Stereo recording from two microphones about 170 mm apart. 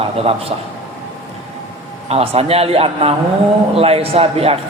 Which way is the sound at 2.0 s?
35° right (ahead or behind).